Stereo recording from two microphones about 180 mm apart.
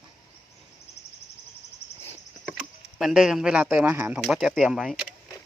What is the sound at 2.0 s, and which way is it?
Speech, 5° right (ahead or behind).